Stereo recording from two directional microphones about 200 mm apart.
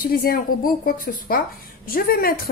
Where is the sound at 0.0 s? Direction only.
45° left (ahead or behind).